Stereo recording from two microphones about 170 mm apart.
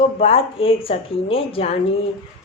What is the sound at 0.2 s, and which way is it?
Speech, 35° left (ahead or behind).